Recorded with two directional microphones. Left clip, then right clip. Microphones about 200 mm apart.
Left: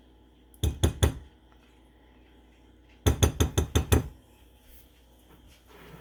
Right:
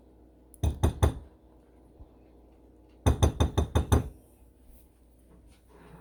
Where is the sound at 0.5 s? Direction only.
5° left (ahead or behind).